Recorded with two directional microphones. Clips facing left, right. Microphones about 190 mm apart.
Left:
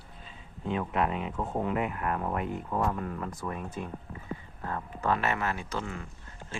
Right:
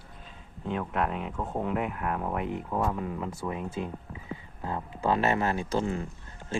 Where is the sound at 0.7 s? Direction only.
5° left (ahead or behind).